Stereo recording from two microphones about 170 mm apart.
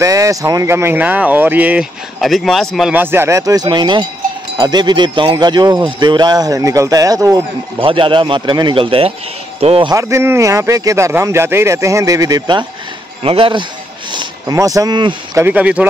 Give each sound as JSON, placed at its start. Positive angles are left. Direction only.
{"t": 0.0, "sound": "speech", "side_deg": -20}
{"t": 7.8, "sound": "a man's voice", "side_deg": -30}
{"t": 9.9, "sound": "a man's voice", "side_deg": -15}
{"t": 14.1, "sound": "speech", "side_deg": -20}
{"t": 15.4, "sound": "speech", "side_deg": -10}